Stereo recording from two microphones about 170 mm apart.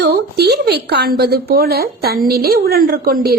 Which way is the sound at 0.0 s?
75° right (ahead or behind).